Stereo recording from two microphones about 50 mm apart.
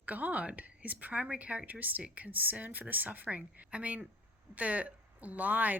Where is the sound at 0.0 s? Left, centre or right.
Right.